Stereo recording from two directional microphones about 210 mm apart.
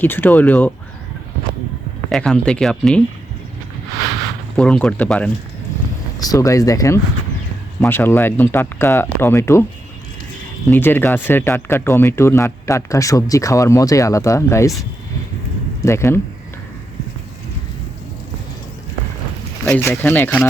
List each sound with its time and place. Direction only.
0.0 s speech: 10° left (ahead or behind)
2.0 s speech: 5° left (ahead or behind)
4.5 s speech: 5° left (ahead or behind)
6.1 s speech: 15° left (ahead or behind)
10.7 s speech: 10° left (ahead or behind)
15.8 s speech: 15° left (ahead or behind)
19.6 s speech: 10° left (ahead or behind)